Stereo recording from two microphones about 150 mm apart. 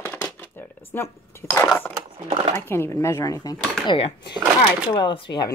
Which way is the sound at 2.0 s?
35° right (ahead or behind).